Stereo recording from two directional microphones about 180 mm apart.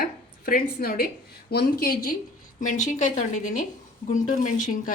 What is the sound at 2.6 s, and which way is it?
A woman's voice, 40° left (ahead or behind).